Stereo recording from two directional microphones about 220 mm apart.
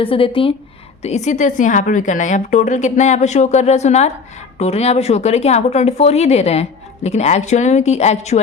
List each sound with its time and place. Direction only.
0.0 s a woman's voice: 25° left (ahead or behind)